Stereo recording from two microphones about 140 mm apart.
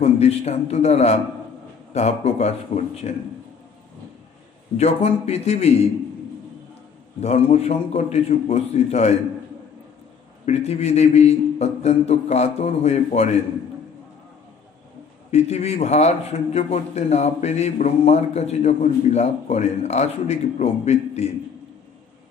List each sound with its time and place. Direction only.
0.0 s a man's voice: 50° left (ahead or behind)
4.7 s a man's voice: 50° left (ahead or behind)
7.2 s a man's voice: 45° left (ahead or behind)
10.4 s a man's voice: 50° left (ahead or behind)
15.3 s a man's voice: 50° left (ahead or behind)